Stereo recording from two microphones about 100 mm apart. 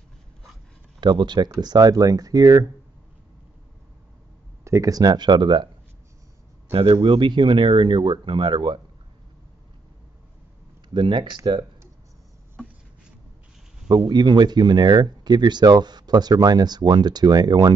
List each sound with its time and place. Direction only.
1.0 s speech: 50° right (ahead or behind)
4.6 s speech: 35° right (ahead or behind); by 5.7 s 50° right (ahead or behind)
6.7 s speech: 75° right (ahead or behind); by 8.7 s 50° right (ahead or behind)
10.9 s speech: 50° right (ahead or behind)
13.8 s speech: 45° right (ahead or behind)